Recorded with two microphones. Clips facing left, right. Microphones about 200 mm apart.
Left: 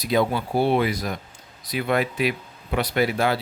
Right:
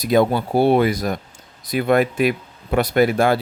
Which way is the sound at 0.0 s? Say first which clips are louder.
Right 5 dB; 50° right (ahead or behind).